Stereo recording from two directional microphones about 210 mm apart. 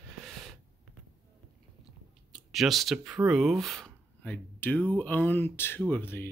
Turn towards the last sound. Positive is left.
turn(degrees=10)  # may be behind; listen again after turning